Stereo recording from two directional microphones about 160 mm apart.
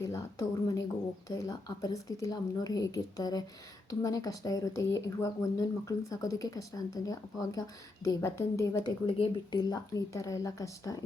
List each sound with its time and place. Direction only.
0.0 s speech: 20° left (ahead or behind)
9.0 s speech: 35° left (ahead or behind)